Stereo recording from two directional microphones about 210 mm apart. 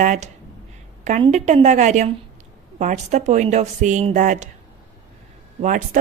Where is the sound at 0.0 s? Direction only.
35° right (ahead or behind).